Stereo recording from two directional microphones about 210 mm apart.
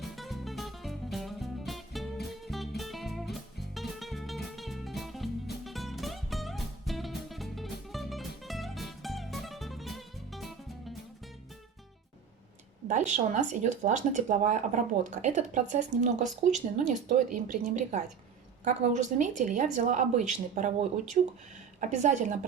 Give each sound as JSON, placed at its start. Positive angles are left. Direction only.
{"t": 0.0, "sound": "music", "side_deg": 0}
{"t": 12.9, "sound": "a woman's voice", "side_deg": -35}